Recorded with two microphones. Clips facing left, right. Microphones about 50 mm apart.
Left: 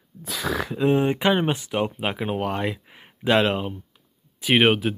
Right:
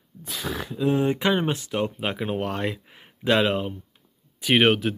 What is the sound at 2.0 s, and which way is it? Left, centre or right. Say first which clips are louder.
Speech: left 1 dB; centre.